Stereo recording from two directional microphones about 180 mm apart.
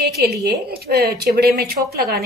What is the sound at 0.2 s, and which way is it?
A woman's voice, 65° right (ahead or behind).